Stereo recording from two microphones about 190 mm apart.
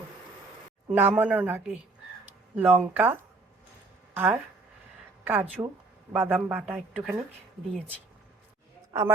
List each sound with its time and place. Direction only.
0.9 s a man's voice: 10° right (ahead or behind)
8.9 s a woman's voice: 15° right (ahead or behind)